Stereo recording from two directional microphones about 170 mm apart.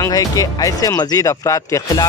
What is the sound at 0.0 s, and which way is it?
Speech, 20° left (ahead or behind).